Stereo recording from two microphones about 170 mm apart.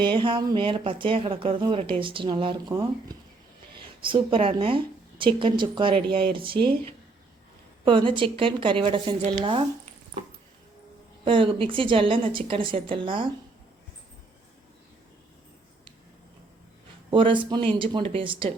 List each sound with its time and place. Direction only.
0.0 s speech: 30° right (ahead or behind)
4.0 s speech: 30° right (ahead or behind)
7.9 s speech: 30° right (ahead or behind)
11.3 s speech: 30° right (ahead or behind)
17.1 s speech: 30° right (ahead or behind)